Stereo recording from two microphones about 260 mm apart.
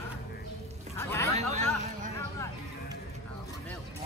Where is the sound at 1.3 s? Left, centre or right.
Right.